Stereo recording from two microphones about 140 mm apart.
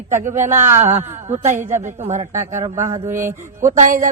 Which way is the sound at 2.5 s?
20° right (ahead or behind).